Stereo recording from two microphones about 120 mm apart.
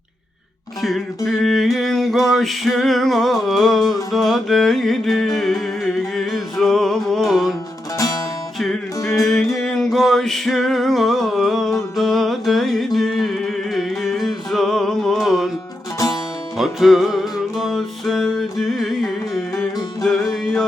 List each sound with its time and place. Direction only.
0.8 s music: centre (ahead or behind)
7.9 s music: 30° left (ahead or behind)
8.5 s music: centre (ahead or behind)
9.0 s music: 25° left (ahead or behind)
9.2 s music: 5° left (ahead or behind)
16.6 s music: centre (ahead or behind)
20.4 s music: centre (ahead or behind)